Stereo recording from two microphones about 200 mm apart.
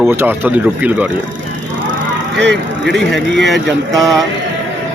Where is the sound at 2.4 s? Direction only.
60° right (ahead or behind).